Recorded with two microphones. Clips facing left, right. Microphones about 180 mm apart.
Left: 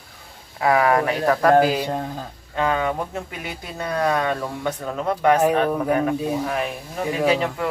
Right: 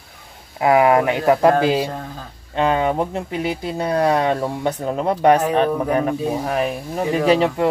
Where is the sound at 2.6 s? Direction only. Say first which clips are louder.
Right 4 dB; 25° right (ahead or behind).